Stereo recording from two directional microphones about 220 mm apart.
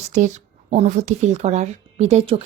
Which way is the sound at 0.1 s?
35° right (ahead or behind).